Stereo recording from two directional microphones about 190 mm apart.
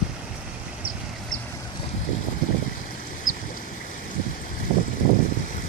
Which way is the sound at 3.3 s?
90° left.